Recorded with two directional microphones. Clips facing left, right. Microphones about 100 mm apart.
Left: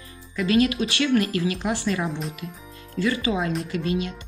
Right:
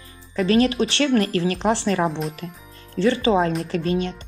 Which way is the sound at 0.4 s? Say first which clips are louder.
Right 3 dB; 35° right (ahead or behind).